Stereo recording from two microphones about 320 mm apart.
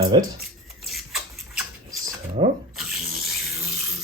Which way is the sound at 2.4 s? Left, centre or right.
Centre.